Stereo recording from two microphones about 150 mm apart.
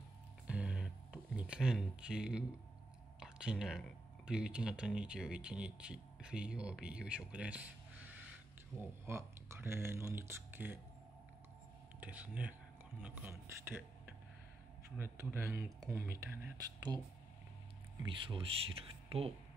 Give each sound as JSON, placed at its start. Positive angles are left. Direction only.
{"t": 0.5, "sound": "a sound", "side_deg": -5}
{"t": 3.2, "sound": "speech", "side_deg": -5}
{"t": 12.0, "sound": "speech", "side_deg": -10}
{"t": 16.9, "sound": "speech", "side_deg": -25}
{"t": 18.2, "sound": "speech", "side_deg": -35}